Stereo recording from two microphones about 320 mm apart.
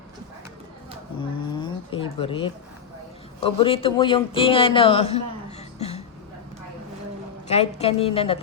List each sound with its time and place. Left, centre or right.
1.5 s speech: centre
7.4 s a woman's voice: centre